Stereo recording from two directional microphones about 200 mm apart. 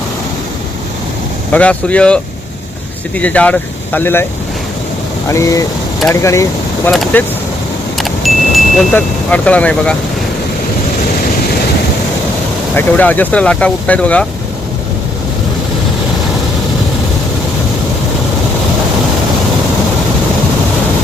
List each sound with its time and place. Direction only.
1.5 s speech: 5° left (ahead or behind)
5.3 s speech: 15° left (ahead or behind)
6.9 s speech: 5° left (ahead or behind)
7.9 s vehicle: centre (ahead or behind)
12.7 s speech: 10° left (ahead or behind)